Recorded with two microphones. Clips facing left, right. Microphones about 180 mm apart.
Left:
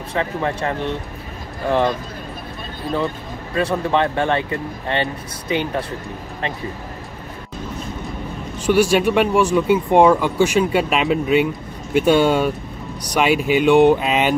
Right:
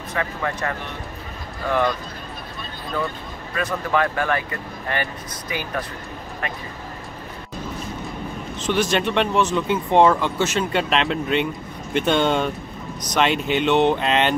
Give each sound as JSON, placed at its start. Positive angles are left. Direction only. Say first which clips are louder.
{"t": 0.1, "sound": "speech", "louder": "left 4 dB", "side_deg": 25}
{"t": 3.5, "sound": "speech", "louder": "left 4 dB", "side_deg": 25}
{"t": 8.5, "sound": "speech", "louder": "left 6 dB", "side_deg": 10}